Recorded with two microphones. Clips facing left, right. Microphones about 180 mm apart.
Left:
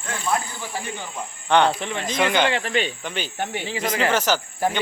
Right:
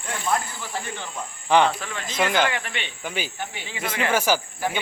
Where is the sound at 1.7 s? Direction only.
25° left (ahead or behind).